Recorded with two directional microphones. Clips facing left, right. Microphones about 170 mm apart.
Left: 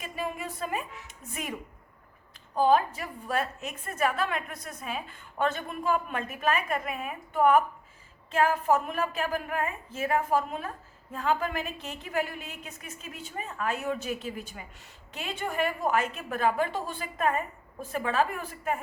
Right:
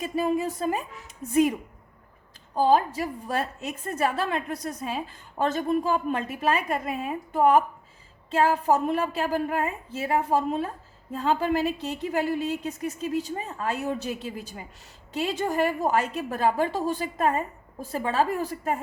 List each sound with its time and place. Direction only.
0.0 s a woman's voice: 40° right (ahead or behind)
2.6 s a woman's voice: 30° right (ahead or behind)